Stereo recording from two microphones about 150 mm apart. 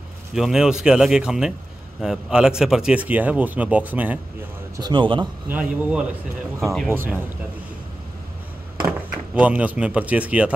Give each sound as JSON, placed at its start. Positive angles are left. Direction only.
{"t": 0.3, "sound": "speech", "side_deg": -5}
{"t": 4.7, "sound": "a man's voice", "side_deg": -30}
{"t": 5.5, "sound": "speech", "side_deg": -5}
{"t": 6.9, "sound": "speech", "side_deg": -15}
{"t": 8.8, "sound": "speech", "side_deg": -10}